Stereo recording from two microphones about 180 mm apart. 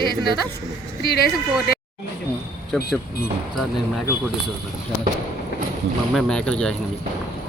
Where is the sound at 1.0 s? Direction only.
60° left (ahead or behind).